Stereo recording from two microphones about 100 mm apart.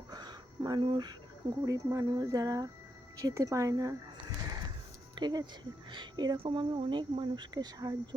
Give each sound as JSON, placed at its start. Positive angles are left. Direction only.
{"t": 0.1, "sound": "a sound", "side_deg": -45}
{"t": 0.8, "sound": "speech", "side_deg": -50}
{"t": 5.2, "sound": "speech", "side_deg": -45}
{"t": 6.4, "sound": "speech", "side_deg": -60}